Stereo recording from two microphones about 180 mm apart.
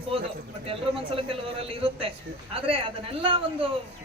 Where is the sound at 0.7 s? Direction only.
30° right (ahead or behind).